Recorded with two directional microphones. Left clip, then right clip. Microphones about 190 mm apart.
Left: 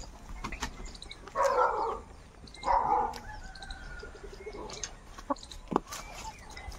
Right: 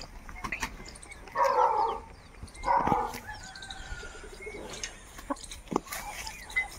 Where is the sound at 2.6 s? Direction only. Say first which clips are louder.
Right 1 dB; 15° right (ahead or behind).